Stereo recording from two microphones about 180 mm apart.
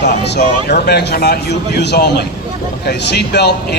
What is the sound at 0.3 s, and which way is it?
A man's voice, 65° left (ahead or behind).